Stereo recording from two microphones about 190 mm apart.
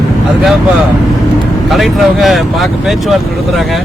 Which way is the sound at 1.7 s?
Centre (ahead or behind).